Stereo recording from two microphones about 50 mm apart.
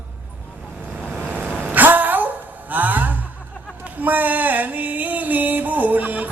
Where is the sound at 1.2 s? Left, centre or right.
Right.